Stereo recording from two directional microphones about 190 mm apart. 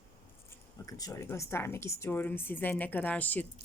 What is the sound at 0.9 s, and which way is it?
A woman's voice, 20° left (ahead or behind).